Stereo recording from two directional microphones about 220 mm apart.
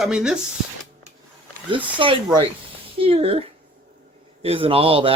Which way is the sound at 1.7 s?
25° right (ahead or behind).